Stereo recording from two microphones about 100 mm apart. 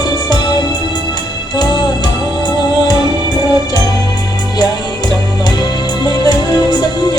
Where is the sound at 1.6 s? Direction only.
45° left (ahead or behind).